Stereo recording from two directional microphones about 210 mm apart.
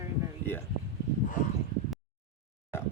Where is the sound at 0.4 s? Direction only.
10° left (ahead or behind).